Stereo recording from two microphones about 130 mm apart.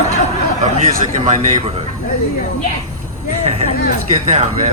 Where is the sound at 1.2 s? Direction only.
50° right (ahead or behind).